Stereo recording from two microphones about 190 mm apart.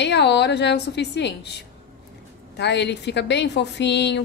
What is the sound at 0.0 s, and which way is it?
A woman's voice, 65° left (ahead or behind).